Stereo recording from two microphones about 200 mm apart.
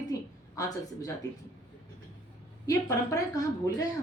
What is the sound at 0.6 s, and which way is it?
Speech, 15° left (ahead or behind).